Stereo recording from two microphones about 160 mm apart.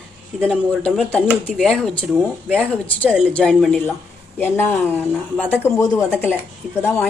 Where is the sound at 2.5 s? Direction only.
10° left (ahead or behind).